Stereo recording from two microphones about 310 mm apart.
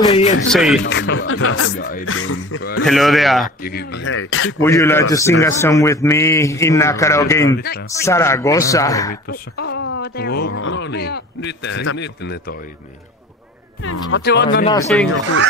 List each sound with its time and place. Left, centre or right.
0.0 s music: centre
0.5 s a man's voice: centre
0.7 s speech: left
1.8 s speech: left
2.0 s speech: left
2.8 s a man's voice: centre
3.4 s speech: left
4.6 s a man's voice: centre
9.3 s speech: left
13.8 s speech: left
14.9 s a man's voice: centre